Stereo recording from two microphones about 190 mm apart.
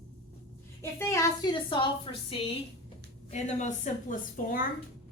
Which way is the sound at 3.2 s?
40° left (ahead or behind).